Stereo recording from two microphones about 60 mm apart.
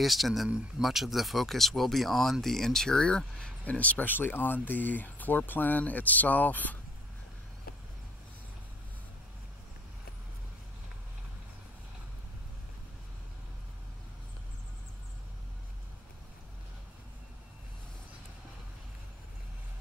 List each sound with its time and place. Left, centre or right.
0.0 s speech: centre; by 6.8 s left